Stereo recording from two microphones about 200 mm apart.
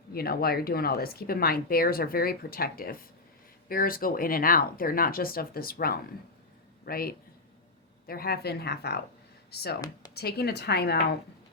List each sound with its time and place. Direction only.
0.1 s a man's voice: 50° left (ahead or behind)